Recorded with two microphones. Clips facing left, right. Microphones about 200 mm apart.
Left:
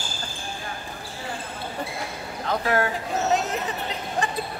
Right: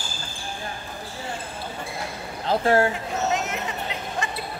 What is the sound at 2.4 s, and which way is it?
Speech, 30° right (ahead or behind).